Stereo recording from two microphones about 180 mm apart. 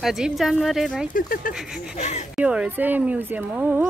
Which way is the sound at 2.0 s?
40° left (ahead or behind).